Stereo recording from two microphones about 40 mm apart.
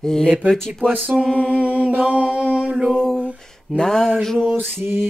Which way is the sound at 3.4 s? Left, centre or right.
Centre.